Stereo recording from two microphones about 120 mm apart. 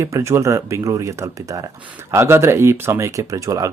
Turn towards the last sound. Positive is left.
turn(degrees=-30)  # may be behind; listen again after turning